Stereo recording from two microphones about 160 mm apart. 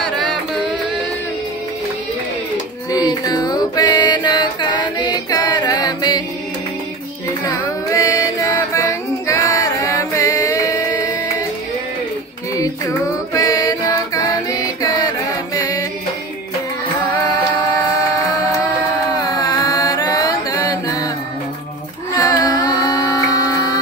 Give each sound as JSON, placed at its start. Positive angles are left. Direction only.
{"t": 0.0, "sound": "a sound", "side_deg": 5}
{"t": 2.9, "sound": "music", "side_deg": 25}
{"t": 7.4, "sound": "music", "side_deg": 20}
{"t": 12.5, "sound": "music", "side_deg": 20}
{"t": 19.0, "sound": "carnatic music", "side_deg": 20}
{"t": 22.1, "sound": "carnatic music", "side_deg": 20}